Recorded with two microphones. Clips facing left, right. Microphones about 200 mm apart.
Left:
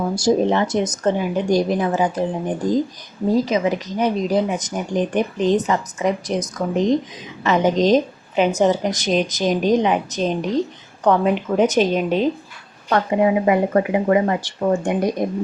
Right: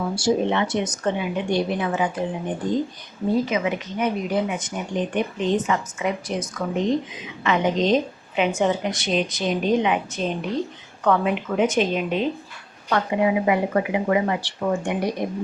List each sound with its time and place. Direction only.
0.1 s speech: 40° left (ahead or behind)
3.2 s speech: 40° left (ahead or behind)